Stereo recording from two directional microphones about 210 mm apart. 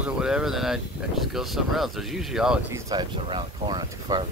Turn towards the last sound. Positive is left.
turn(degrees=-20)  # may be behind; listen again after turning